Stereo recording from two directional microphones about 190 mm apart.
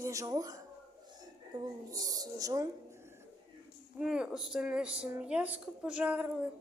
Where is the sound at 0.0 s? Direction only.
15° right (ahead or behind).